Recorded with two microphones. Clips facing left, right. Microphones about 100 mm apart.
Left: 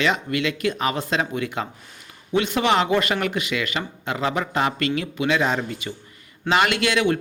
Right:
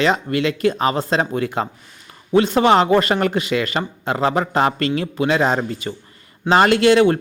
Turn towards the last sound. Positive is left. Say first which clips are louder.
# right 8 dB
turn(degrees=-35)  # may be behind; listen again after turning